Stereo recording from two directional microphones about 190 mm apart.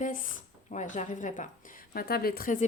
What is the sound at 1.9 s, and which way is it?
Speech, 55° left (ahead or behind).